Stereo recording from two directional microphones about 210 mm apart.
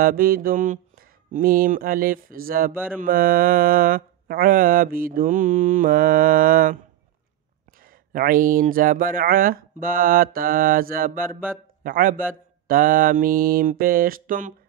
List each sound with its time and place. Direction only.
0.0 s mantra: 45° right (ahead or behind)
7.8 s mantra: 40° right (ahead or behind)
11.8 s a man's voice: 40° right (ahead or behind)
12.6 s mantra: 40° right (ahead or behind)